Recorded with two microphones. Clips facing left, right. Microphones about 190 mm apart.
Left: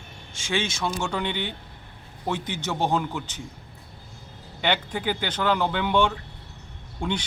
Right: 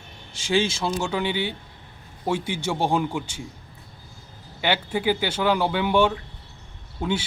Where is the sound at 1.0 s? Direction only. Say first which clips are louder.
Right 3 dB; 5° right (ahead or behind).